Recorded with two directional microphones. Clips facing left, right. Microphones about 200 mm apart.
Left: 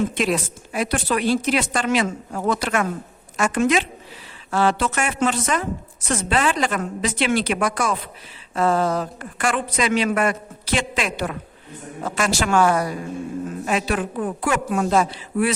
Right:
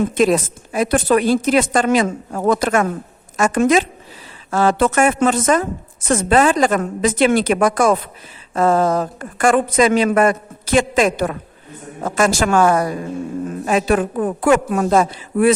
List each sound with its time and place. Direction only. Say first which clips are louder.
0.0 s a woman's voice: right 6 dB; 45° right (ahead or behind)